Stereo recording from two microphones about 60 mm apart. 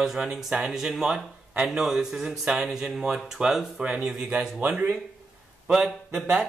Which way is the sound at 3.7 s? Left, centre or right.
Right.